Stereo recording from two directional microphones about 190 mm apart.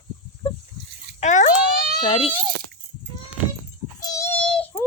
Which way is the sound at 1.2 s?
40° left (ahead or behind).